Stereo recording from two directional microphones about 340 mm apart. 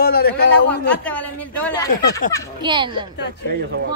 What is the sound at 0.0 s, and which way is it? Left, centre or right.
Speech, left.